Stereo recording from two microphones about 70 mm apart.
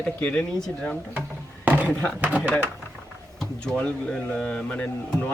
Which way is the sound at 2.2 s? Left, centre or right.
Right.